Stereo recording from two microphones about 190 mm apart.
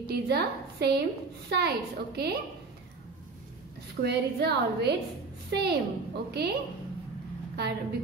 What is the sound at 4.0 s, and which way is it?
A woman's voice, 60° right (ahead or behind).